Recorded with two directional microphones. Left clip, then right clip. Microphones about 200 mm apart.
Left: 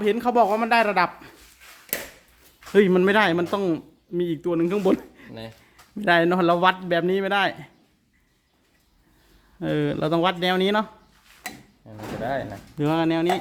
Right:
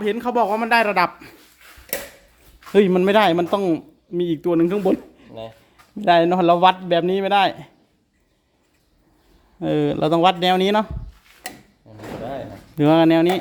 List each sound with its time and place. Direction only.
0.0 s speech: 5° left (ahead or behind); by 1.4 s 10° right (ahead or behind)
2.7 s speech: 5° right (ahead or behind)
4.8 s a sound: centre (ahead or behind)
5.7 s speech: 5° right (ahead or behind)
9.6 s speech: 10° right (ahead or behind)
11.9 s a sound: 30° left (ahead or behind)
12.7 s speech: 20° right (ahead or behind)